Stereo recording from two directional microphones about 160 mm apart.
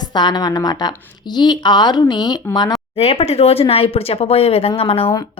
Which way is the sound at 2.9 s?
40° left (ahead or behind).